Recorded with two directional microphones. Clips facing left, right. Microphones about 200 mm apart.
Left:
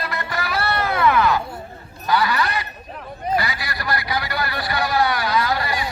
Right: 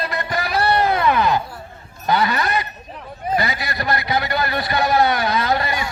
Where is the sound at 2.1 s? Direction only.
20° right (ahead or behind).